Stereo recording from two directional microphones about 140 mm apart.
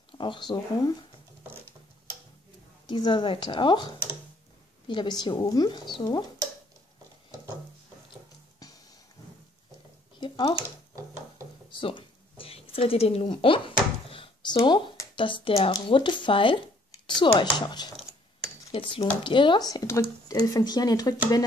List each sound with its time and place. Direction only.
0.2 s speech: 35° left (ahead or behind)
2.9 s speech: 35° left (ahead or behind)
10.2 s a sound: 35° left (ahead or behind)
11.7 s a sound: 35° left (ahead or behind)
15.1 s speech: 35° left (ahead or behind)
18.7 s speech: 40° left (ahead or behind); by 21.1 s 25° left (ahead or behind)